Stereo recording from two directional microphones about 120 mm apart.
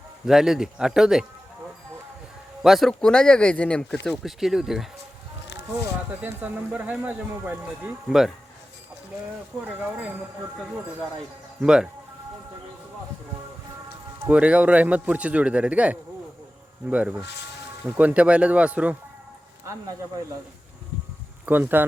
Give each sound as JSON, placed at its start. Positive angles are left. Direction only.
{"t": 0.3, "sound": "speech", "side_deg": -5}
{"t": 2.6, "sound": "speech", "side_deg": 0}
{"t": 6.2, "sound": "speech", "side_deg": -15}
{"t": 9.6, "sound": "speech", "side_deg": -10}
{"t": 11.6, "sound": "speech", "side_deg": -5}
{"t": 14.3, "sound": "speech", "side_deg": -10}
{"t": 21.4, "sound": "speech", "side_deg": -15}